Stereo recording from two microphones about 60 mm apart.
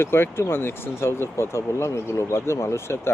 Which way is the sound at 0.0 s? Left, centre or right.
Left.